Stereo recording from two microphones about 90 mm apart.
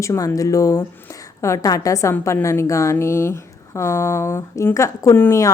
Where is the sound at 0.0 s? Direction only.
35° left (ahead or behind).